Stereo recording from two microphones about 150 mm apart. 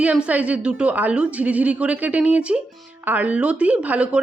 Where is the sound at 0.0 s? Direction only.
10° right (ahead or behind).